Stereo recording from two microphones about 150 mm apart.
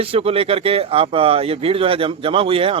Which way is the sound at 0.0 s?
40° right (ahead or behind).